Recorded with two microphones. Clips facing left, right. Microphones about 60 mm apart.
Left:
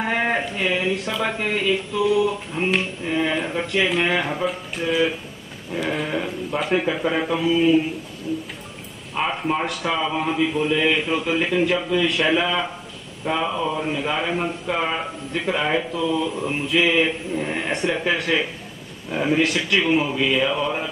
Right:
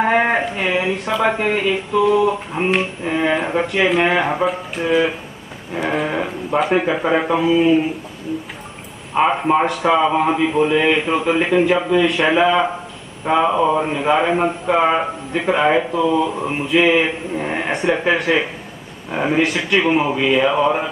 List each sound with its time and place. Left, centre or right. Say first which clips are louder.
0.0 s a man's voice: right 6 dB; centre
3.6 s a man's voice: right 4 dB; centre
4.5 s a man's voice: right 5 dB; centre
9.1 s a man's voice: right 8 dB; centre
9.7 s speech: right 8 dB; centre
9.9 s a man's voice: right 5 dB; centre